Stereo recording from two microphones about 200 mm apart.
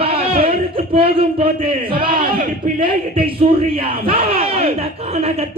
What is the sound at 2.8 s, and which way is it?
A man's voice, 25° right (ahead or behind).